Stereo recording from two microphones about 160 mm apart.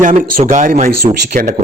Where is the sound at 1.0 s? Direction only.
45° right (ahead or behind).